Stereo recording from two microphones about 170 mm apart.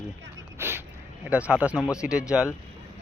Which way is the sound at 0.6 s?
15° right (ahead or behind).